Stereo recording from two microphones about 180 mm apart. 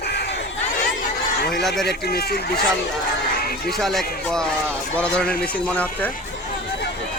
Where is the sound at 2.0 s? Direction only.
60° left (ahead or behind).